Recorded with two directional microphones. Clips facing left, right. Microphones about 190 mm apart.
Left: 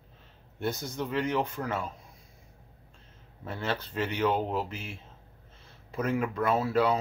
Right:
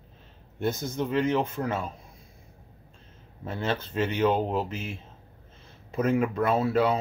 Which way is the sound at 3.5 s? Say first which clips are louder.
Right 3 dB; 20° right (ahead or behind).